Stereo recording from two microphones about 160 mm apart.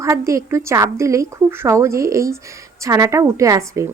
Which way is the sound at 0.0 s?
20° right (ahead or behind).